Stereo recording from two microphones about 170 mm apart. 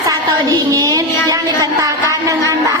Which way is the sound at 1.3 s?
20° right (ahead or behind).